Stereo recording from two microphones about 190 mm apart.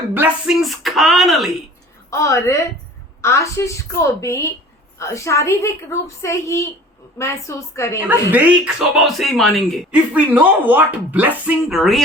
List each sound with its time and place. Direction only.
0.1 s speech: 5° right (ahead or behind)
2.0 s a woman's voice: 15° left (ahead or behind)
7.9 s speech: 10° right (ahead or behind)